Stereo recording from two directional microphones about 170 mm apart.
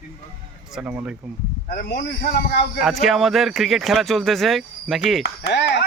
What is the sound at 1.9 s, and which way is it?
Speech, 70° left (ahead or behind).